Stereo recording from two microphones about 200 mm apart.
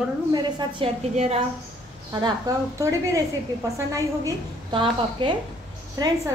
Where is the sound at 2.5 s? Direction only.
15° right (ahead or behind).